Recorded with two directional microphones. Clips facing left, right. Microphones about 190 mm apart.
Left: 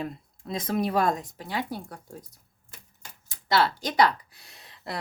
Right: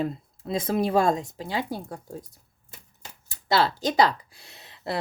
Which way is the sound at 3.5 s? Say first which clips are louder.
Right 2 dB; 25° right (ahead or behind).